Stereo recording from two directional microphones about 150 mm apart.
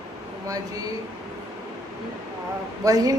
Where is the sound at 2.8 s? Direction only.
25° right (ahead or behind).